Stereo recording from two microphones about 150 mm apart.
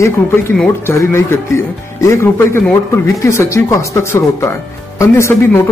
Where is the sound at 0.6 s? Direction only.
15° left (ahead or behind).